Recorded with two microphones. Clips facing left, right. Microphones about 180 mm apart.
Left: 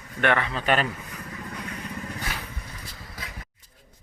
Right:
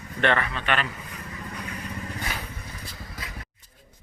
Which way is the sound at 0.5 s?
40° left (ahead or behind).